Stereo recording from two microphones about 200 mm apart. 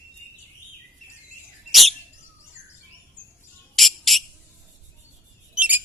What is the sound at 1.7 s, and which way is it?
Bird, centre (ahead or behind).